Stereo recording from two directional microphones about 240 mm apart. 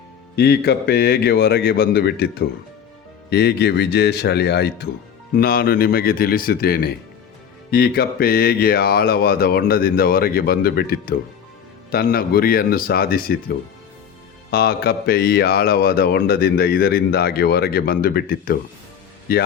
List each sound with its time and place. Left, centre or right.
0.3 s speech: left
14.5 s speech: left